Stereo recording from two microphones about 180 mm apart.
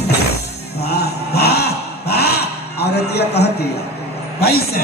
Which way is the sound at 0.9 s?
60° left (ahead or behind).